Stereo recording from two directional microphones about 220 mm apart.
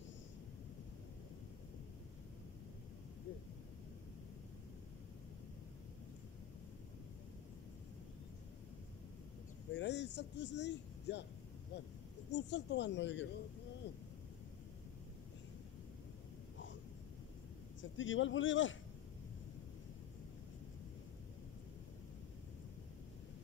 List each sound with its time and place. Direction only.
9.7 s speech: 55° left (ahead or behind)
17.9 s a man's voice: 60° left (ahead or behind)